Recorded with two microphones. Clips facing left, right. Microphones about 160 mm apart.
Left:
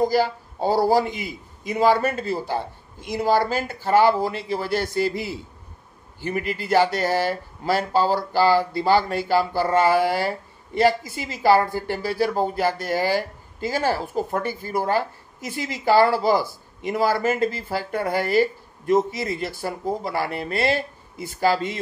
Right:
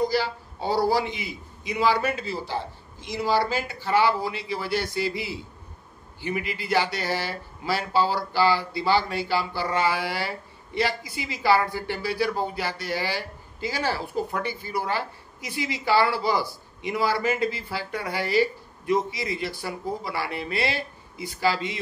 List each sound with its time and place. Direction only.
0.0 s speech: 45° left (ahead or behind)